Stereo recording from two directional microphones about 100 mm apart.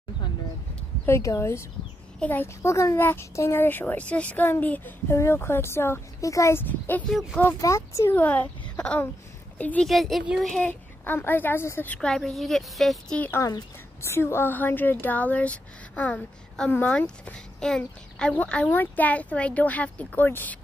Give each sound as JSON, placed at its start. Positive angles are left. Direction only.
{"t": 1.0, "sound": "speech", "side_deg": 30}
{"t": 2.1, "sound": "a child's voice", "side_deg": 15}
{"t": 2.4, "sound": "speech", "side_deg": 30}
{"t": 6.6, "sound": "speech", "side_deg": 15}
{"t": 7.1, "sound": "a woman's voice", "side_deg": 0}
{"t": 7.6, "sound": "speech", "side_deg": 30}
{"t": 8.2, "sound": "a child's voice", "side_deg": 15}
{"t": 9.8, "sound": "a woman's voice", "side_deg": 0}
{"t": 10.7, "sound": "speech", "side_deg": 20}
{"t": 12.1, "sound": "a woman's voice", "side_deg": 0}
{"t": 14.0, "sound": "speech", "side_deg": 25}